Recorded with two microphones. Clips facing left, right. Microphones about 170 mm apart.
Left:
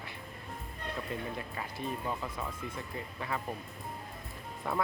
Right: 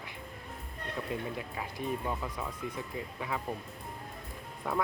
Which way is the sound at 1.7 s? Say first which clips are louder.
Right 2 dB; 15° right (ahead or behind).